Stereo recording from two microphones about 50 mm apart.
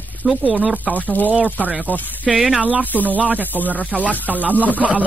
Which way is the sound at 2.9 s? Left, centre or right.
Left.